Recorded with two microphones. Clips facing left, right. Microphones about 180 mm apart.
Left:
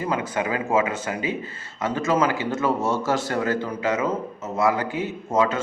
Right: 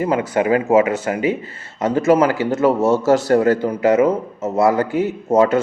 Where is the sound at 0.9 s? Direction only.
20° left (ahead or behind).